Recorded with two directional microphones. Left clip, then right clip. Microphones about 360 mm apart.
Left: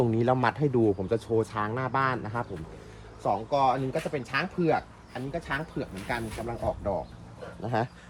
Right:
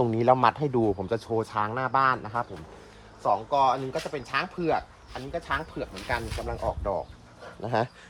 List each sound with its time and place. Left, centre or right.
0.1 s speech: centre
3.5 s speech: centre